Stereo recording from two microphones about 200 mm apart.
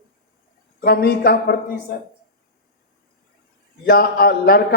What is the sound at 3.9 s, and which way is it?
Speech, 50° left (ahead or behind).